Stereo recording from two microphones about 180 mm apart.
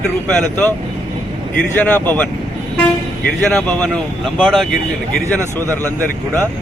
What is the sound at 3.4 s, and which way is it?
Speech, 5° left (ahead or behind).